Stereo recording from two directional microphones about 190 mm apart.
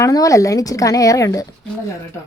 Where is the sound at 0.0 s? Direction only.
15° left (ahead or behind).